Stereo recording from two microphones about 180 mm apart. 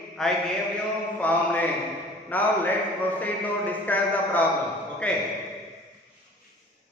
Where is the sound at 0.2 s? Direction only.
Centre (ahead or behind).